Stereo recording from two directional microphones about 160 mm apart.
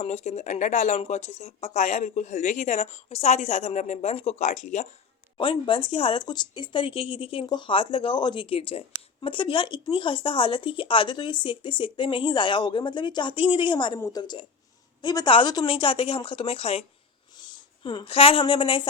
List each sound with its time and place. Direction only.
0.0 s speech: 40° left (ahead or behind)
5.4 s a woman's voice: 30° left (ahead or behind)